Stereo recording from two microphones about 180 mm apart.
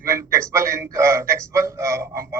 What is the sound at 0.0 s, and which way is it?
A man's voice, 15° right (ahead or behind).